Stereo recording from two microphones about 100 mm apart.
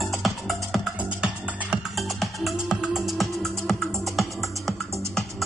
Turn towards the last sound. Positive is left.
turn(degrees=5)  # may be behind; listen again after turning